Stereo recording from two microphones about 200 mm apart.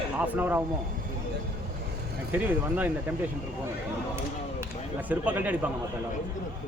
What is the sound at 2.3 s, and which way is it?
Speech, 10° right (ahead or behind).